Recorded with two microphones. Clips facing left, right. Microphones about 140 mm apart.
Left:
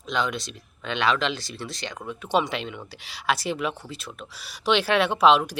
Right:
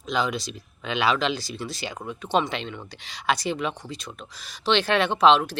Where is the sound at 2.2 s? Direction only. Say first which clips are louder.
Even; 10° left (ahead or behind).